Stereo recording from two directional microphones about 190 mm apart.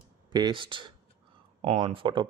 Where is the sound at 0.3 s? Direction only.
25° right (ahead or behind).